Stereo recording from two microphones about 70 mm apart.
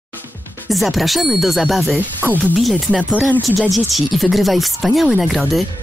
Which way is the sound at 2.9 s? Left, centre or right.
Right.